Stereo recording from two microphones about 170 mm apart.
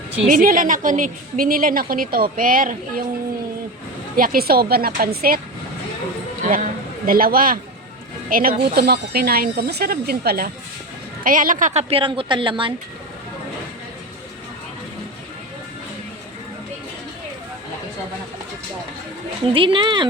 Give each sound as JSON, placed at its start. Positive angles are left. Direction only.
{"t": 0.3, "sound": "a woman's voice", "side_deg": -55}
{"t": 4.2, "sound": "a woman's voice", "side_deg": -60}
{"t": 7.0, "sound": "a woman's voice", "side_deg": -60}
{"t": 8.7, "sound": "a woman's voice", "side_deg": -70}
{"t": 19.5, "sound": "speech", "side_deg": -30}